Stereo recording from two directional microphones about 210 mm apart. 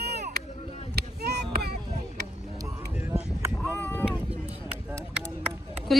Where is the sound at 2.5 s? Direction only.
10° right (ahead or behind); by 4.0 s 10° left (ahead or behind).